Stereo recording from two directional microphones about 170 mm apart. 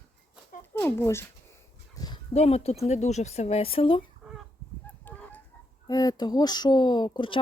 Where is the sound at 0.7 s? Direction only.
15° left (ahead or behind).